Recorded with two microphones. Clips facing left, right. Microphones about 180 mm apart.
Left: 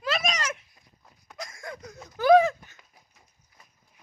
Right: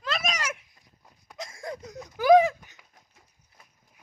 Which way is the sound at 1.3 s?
30° right (ahead or behind).